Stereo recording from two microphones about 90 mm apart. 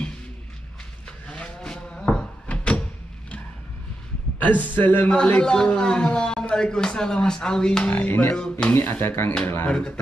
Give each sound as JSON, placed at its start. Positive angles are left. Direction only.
{"t": 1.2, "sound": "sheep", "side_deg": 15}
{"t": 4.4, "sound": "a man's voice", "side_deg": 20}
{"t": 7.9, "sound": "speech", "side_deg": 25}
{"t": 8.4, "sound": "a man's voice", "side_deg": 10}
{"t": 8.7, "sound": "speech", "side_deg": 25}
{"t": 9.7, "sound": "a man's voice", "side_deg": 10}